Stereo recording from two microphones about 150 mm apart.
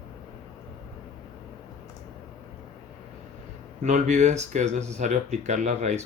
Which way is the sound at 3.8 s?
50° right (ahead or behind).